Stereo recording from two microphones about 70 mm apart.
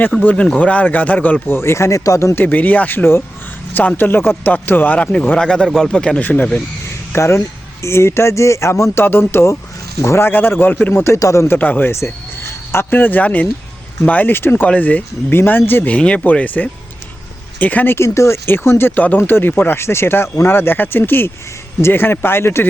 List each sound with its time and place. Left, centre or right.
0.4 s speech: centre
1.5 s speech: left
2.3 s speech: left
7.1 s speech: left
11.2 s speech: left
11.4 s speech: left
11.9 s speech: left
15.9 s speech: centre
17.9 s speech: left